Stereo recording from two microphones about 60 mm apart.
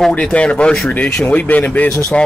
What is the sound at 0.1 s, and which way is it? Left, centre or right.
Speech, centre.